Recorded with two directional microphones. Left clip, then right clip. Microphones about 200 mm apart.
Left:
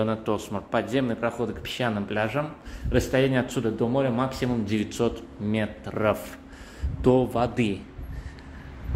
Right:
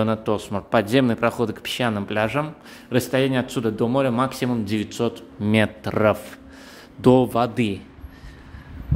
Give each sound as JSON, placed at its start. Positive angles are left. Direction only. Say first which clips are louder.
{"t": 0.0, "sound": "a man's voice", "louder": "right 4 dB", "side_deg": -30}
{"t": 5.4, "sound": "a man's voice", "louder": "right 9 dB", "side_deg": -45}